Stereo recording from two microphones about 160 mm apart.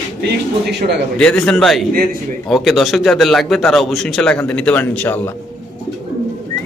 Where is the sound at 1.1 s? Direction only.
5° left (ahead or behind).